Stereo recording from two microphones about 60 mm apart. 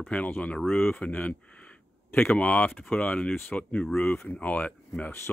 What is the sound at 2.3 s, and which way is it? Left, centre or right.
Speech, left.